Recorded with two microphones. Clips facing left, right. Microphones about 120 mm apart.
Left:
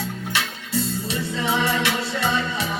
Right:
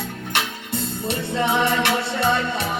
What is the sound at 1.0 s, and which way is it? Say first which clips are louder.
Music: right 3 dB; 60° right (ahead or behind).